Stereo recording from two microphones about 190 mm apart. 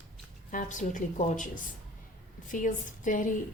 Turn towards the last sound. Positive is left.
turn(degrees=40)  # may be behind; listen again after turning